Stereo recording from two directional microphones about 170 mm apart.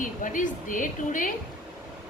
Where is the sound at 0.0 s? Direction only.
50° left (ahead or behind).